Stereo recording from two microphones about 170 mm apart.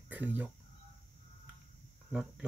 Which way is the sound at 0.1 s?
10° right (ahead or behind).